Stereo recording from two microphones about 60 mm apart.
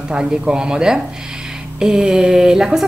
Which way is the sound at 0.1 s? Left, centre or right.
Centre.